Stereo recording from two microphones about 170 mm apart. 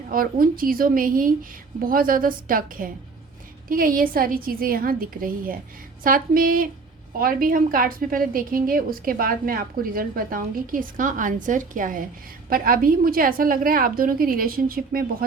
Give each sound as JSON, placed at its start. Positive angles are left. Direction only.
{"t": 0.1, "sound": "a woman's voice", "side_deg": -55}